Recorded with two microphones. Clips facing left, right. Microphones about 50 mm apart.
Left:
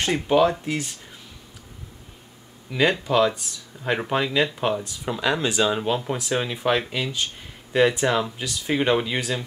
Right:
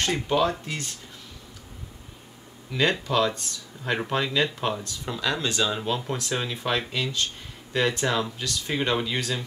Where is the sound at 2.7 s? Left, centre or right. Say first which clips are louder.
Left 3 dB; centre.